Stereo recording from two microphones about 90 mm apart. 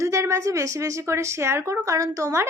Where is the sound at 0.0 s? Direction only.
35° right (ahead or behind).